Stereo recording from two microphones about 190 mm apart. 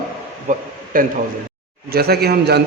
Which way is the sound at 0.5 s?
40° right (ahead or behind).